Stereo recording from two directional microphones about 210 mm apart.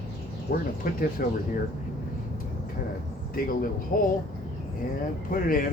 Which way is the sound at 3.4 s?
45° left (ahead or behind).